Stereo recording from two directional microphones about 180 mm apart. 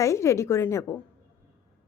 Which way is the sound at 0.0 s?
15° left (ahead or behind).